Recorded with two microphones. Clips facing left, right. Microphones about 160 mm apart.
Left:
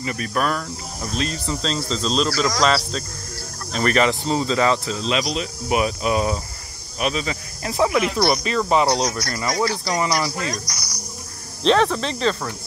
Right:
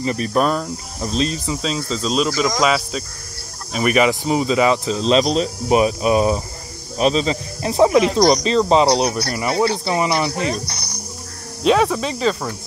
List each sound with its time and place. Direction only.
0.0 s speech: 30° right (ahead or behind)
1.5 s speech: 5° right (ahead or behind)
5.0 s speech: 35° right (ahead or behind)
11.6 s speech: 10° right (ahead or behind)